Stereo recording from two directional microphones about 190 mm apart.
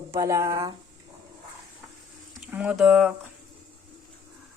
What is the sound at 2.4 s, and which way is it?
Speech, 5° right (ahead or behind).